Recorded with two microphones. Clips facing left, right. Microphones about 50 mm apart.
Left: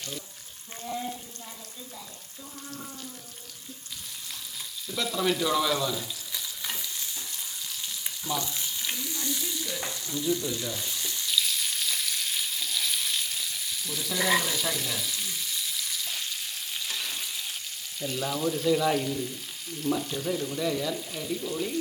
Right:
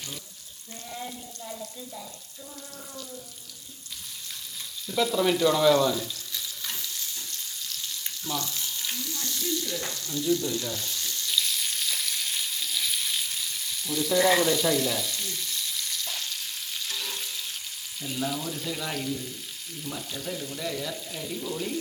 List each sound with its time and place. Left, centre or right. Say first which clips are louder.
0.9 s speech: left 4 dB; centre
4.9 s frying: right 4 dB; centre
11.3 s frying: even; centre
18.0 s speech: left 2 dB; centre